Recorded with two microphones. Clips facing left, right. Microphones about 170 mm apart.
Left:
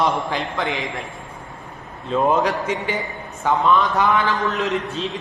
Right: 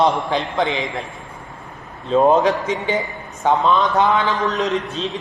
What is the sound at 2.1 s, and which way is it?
A man's voice, 30° right (ahead or behind).